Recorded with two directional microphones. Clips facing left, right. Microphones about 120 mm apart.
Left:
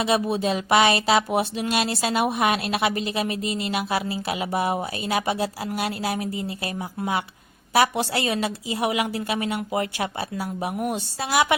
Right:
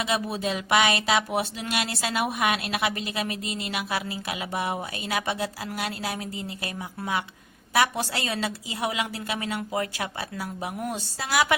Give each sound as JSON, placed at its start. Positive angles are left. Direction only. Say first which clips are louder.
{"t": 0.0, "sound": "speech", "louder": "left 5 dB", "side_deg": 25}